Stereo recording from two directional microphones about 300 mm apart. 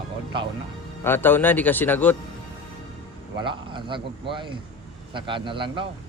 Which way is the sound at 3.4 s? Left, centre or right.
Centre.